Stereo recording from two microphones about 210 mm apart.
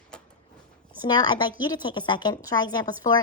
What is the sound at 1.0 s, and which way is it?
A woman's voice, 20° left (ahead or behind).